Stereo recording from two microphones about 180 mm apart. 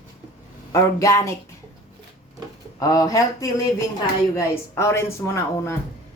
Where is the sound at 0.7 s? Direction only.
15° left (ahead or behind).